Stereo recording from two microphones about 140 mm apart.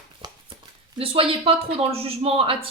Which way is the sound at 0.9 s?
40° right (ahead or behind).